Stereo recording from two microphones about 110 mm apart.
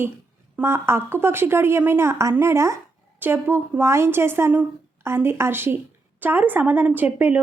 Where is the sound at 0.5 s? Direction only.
25° right (ahead or behind).